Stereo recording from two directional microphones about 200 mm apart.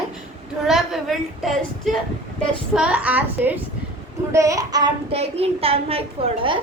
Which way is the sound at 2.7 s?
5° right (ahead or behind).